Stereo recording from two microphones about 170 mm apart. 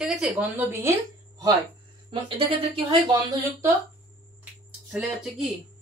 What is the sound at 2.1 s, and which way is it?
Speech, 30° right (ahead or behind).